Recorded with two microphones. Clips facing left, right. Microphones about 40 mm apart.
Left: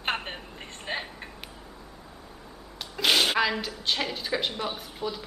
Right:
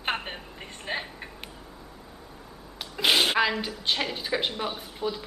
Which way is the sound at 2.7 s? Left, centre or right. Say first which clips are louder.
Right 1 dB; centre.